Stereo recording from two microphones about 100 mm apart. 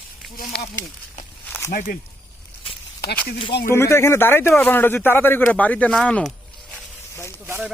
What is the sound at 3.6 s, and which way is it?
Speech, 25° left (ahead or behind).